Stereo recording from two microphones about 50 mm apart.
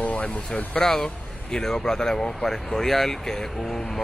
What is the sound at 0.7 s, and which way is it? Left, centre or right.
Speech, centre.